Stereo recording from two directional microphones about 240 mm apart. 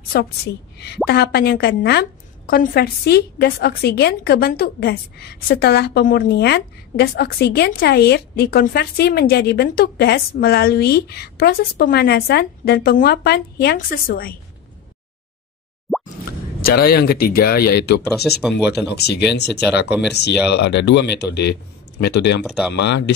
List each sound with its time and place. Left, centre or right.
0.1 s a woman's voice: left
15.9 s plop: centre
16.6 s a woman's voice: left
18.3 s speech: centre
18.7 s speech: left
22.4 s speech: centre
22.8 s speech: left